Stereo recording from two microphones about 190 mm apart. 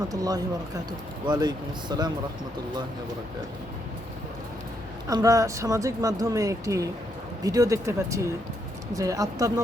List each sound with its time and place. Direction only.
0.1 s speech: 20° right (ahead or behind)
5.0 s speech: 15° right (ahead or behind)